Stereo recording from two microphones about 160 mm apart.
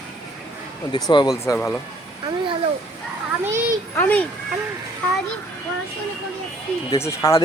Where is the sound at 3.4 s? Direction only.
15° right (ahead or behind).